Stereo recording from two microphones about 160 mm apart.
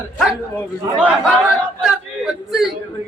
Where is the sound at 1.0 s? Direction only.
10° right (ahead or behind).